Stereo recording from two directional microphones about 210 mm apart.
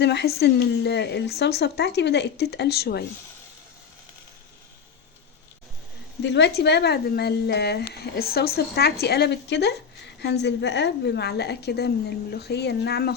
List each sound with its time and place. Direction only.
0.0 s speech: 55° left (ahead or behind)
6.2 s speech: 55° left (ahead or behind)